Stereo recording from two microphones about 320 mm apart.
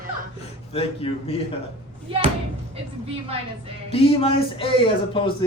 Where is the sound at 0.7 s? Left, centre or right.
Centre.